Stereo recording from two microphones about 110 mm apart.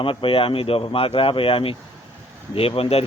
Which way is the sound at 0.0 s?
50° left (ahead or behind).